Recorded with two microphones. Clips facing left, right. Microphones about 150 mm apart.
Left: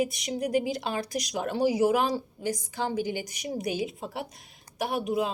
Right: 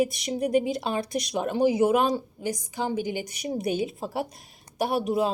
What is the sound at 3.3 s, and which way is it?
Speech, 30° right (ahead or behind).